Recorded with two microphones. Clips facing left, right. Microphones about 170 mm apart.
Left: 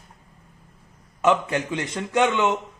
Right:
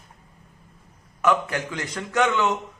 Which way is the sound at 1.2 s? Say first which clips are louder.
Left 2 dB; 25° left (ahead or behind).